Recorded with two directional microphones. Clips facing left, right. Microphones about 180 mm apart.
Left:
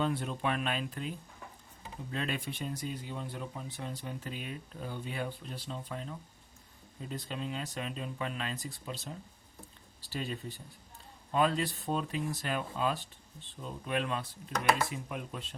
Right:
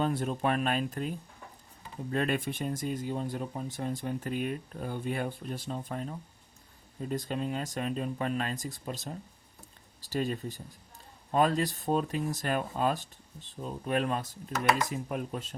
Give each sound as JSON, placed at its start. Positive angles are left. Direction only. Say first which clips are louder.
{"t": 0.0, "sound": "speech", "louder": "right 3 dB", "side_deg": -45}
{"t": 2.1, "sound": "speech", "louder": "right 6 dB", "side_deg": -50}